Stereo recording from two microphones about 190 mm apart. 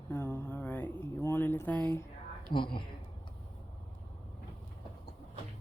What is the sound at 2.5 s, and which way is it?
Speech, 25° left (ahead or behind).